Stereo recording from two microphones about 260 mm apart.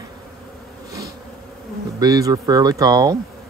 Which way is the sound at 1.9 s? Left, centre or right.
Centre.